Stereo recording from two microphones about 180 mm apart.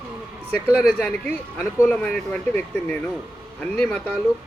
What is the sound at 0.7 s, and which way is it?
Speech, 10° left (ahead or behind).